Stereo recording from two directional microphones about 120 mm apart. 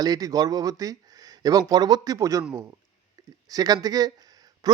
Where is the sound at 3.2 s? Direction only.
30° right (ahead or behind).